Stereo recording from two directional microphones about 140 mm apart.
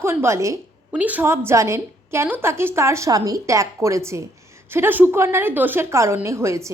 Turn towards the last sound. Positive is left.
turn(degrees=-20)  # may be behind; listen again after turning